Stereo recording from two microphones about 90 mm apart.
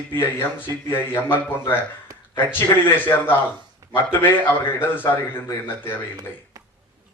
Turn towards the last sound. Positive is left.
turn(degrees=-40)  # may be behind; listen again after turning